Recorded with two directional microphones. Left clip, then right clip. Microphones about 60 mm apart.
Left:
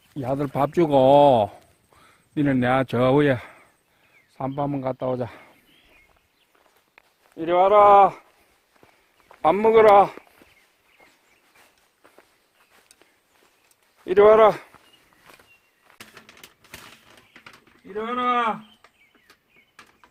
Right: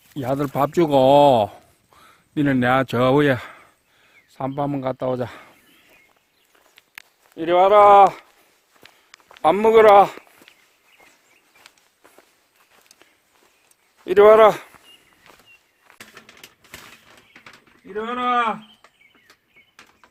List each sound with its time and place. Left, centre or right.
0.2 s speech: right
0.4 s speech: centre
4.4 s a man's voice: centre
7.3 s speech: right
9.3 s a sound: right
9.9 s speech: right
14.3 s speech: right
16.0 s a sound: centre
17.9 s speech: centre